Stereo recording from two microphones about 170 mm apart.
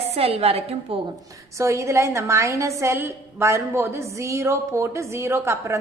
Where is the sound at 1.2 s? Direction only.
20° right (ahead or behind).